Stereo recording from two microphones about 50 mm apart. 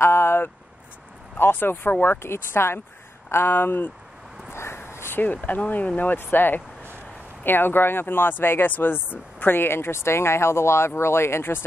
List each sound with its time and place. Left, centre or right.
0.0 s a sound: left
1.4 s speech: left
4.5 s dog: left
5.2 s speech: left